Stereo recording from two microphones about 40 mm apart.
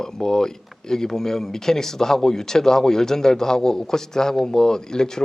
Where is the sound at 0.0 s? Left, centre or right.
Centre.